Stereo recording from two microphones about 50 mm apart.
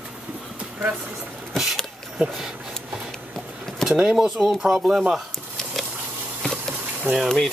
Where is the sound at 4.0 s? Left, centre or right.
Centre.